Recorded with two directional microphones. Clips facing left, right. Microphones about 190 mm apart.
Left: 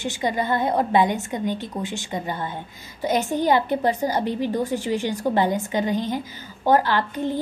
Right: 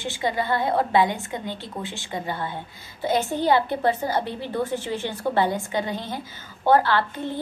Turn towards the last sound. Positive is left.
turn(degrees=15)  # may be behind; listen again after turning